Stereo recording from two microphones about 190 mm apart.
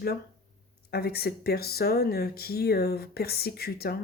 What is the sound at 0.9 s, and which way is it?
Speech, 55° left (ahead or behind).